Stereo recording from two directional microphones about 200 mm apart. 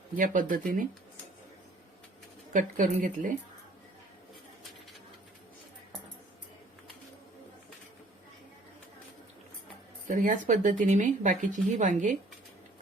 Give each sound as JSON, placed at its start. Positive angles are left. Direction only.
{"t": 0.2, "sound": "speech", "side_deg": -40}
{"t": 2.5, "sound": "speech", "side_deg": -40}
{"t": 10.1, "sound": "speech", "side_deg": -40}